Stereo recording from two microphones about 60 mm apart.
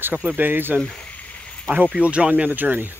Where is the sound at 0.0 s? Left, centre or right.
Right.